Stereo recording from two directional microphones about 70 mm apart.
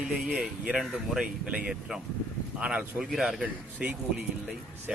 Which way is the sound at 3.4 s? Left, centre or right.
Centre.